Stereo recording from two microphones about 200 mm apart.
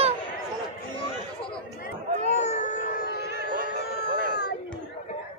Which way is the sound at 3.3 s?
55° right (ahead or behind).